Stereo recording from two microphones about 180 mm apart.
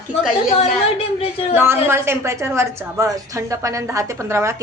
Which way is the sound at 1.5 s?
15° right (ahead or behind).